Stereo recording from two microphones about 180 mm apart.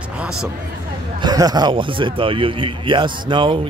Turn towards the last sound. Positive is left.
turn(degrees=-25)  # may be behind; listen again after turning